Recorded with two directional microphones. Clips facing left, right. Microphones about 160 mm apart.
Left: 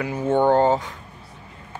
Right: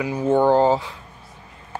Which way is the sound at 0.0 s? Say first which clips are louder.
Right 2 dB; 15° right (ahead or behind).